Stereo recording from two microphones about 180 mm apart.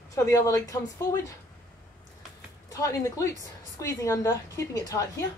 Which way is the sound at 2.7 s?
20° left (ahead or behind).